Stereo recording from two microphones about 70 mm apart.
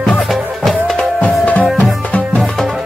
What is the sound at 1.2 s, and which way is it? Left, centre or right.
Music, left.